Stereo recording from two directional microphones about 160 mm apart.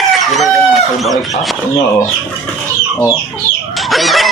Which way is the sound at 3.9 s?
Centre (ahead or behind).